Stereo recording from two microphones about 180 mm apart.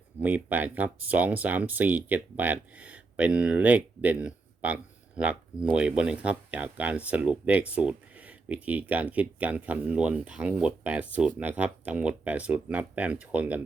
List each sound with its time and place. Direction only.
0.2 s speech: 10° right (ahead or behind)